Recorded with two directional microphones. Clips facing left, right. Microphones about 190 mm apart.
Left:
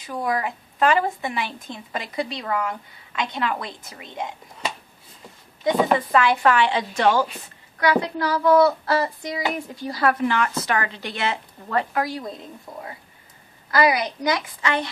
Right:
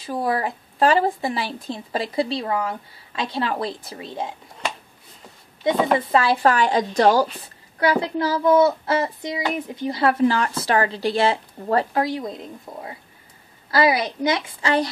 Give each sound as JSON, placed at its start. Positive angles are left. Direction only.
{"t": 0.0, "sound": "speech", "side_deg": -35}
{"t": 5.6, "sound": "speech", "side_deg": -30}
{"t": 7.8, "sound": "speech", "side_deg": -25}